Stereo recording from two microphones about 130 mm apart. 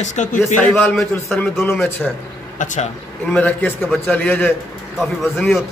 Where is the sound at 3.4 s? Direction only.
15° left (ahead or behind).